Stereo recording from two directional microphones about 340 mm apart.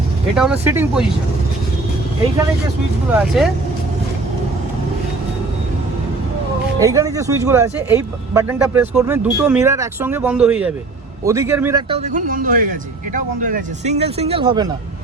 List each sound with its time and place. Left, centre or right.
0.3 s speech: centre
3.1 s speech: centre
6.7 s speech: centre